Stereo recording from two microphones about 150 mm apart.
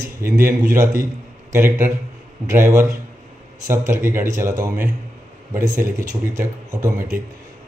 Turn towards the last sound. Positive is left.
turn(degrees=-20)  # may be behind; listen again after turning